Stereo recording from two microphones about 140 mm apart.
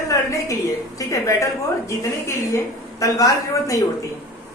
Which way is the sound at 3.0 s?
25° left (ahead or behind).